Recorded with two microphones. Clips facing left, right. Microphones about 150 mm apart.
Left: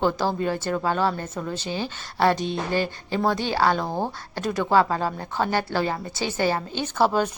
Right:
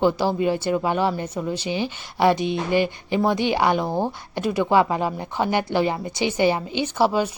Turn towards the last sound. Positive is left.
turn(degrees=-10)  # may be behind; listen again after turning